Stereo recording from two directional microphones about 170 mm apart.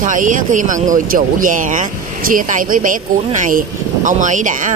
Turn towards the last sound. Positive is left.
turn(degrees=-50)  # may be behind; listen again after turning